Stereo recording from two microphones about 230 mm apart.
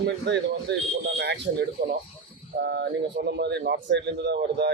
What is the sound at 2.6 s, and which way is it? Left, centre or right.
Speech, right.